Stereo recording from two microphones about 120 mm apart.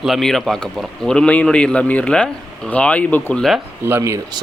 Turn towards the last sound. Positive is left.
turn(degrees=-20)  # may be behind; listen again after turning